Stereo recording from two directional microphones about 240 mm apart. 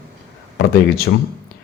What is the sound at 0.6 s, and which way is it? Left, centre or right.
Speech, left.